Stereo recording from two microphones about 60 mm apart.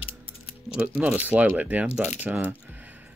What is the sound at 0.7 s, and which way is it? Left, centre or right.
Speech, centre.